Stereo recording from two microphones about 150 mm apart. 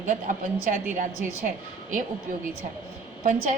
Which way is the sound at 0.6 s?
60° right (ahead or behind).